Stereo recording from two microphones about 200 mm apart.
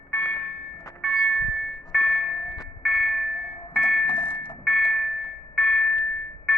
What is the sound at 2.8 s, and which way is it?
Vehicle, centre (ahead or behind).